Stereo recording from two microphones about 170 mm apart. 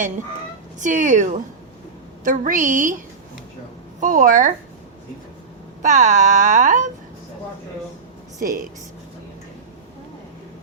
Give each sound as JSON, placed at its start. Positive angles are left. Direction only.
{"t": 0.8, "sound": "speech", "side_deg": -45}
{"t": 4.0, "sound": "speech", "side_deg": -50}
{"t": 5.8, "sound": "speech", "side_deg": -45}
{"t": 8.4, "sound": "speech", "side_deg": -55}